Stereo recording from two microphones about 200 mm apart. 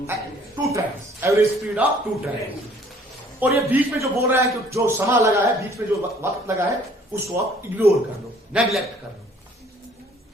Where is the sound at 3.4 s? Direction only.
10° right (ahead or behind).